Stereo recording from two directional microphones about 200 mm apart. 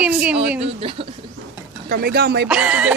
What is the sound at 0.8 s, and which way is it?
Speech, 25° right (ahead or behind).